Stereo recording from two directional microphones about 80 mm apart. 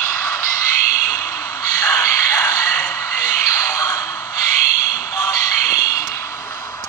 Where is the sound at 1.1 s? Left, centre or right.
Left.